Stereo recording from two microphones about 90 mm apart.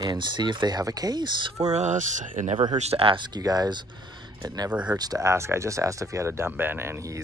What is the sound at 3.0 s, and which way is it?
Speech, 80° right.